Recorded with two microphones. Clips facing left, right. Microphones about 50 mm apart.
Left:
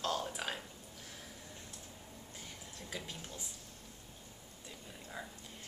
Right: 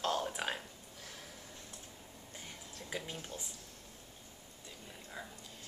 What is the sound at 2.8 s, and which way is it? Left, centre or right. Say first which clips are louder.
Speech: right 3 dB; centre.